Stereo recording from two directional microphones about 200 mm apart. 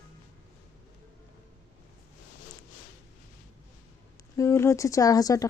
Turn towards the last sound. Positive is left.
turn(degrees=15)  # may be behind; listen again after turning